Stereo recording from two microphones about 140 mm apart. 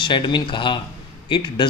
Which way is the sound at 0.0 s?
35° left (ahead or behind).